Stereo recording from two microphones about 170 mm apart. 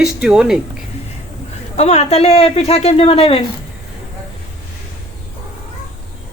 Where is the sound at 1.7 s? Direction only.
40° left (ahead or behind).